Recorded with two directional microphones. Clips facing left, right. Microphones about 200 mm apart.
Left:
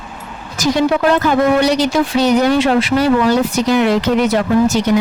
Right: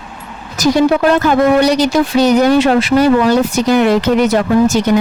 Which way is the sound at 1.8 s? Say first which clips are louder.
Right 3 dB; 40° right (ahead or behind).